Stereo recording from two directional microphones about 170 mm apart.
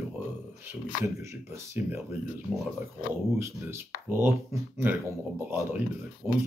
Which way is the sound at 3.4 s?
15° right (ahead or behind).